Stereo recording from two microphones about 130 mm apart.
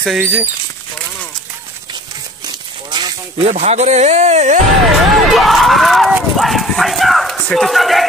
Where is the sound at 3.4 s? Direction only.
55° right (ahead or behind).